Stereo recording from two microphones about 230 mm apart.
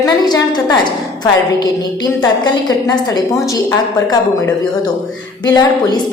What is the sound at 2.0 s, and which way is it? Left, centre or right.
A woman's voice, centre.